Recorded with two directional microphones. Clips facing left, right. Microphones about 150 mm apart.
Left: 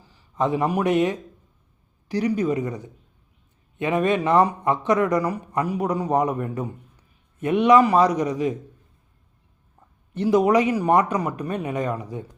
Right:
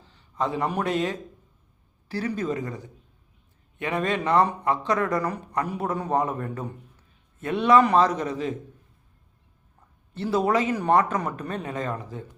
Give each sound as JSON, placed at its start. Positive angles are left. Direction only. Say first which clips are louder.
{"t": 0.1, "sound": "a man's voice", "louder": "left 5 dB", "side_deg": 15}
{"t": 10.2, "sound": "a man's voice", "louder": "left 5 dB", "side_deg": 15}